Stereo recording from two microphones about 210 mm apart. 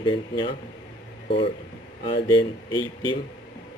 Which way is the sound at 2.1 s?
20° left (ahead or behind).